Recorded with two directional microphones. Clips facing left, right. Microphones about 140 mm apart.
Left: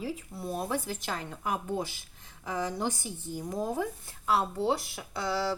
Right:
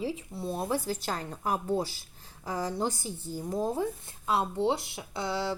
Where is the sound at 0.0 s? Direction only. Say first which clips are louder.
Right 2 dB; 25° right (ahead or behind).